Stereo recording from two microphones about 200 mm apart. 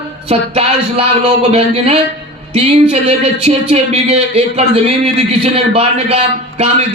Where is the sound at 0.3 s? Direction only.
30° right (ahead or behind).